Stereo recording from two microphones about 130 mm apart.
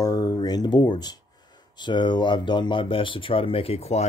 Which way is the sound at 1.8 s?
35° left (ahead or behind).